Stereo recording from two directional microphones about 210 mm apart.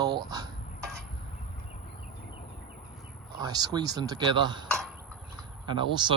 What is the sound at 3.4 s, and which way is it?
Speech, 20° right (ahead or behind).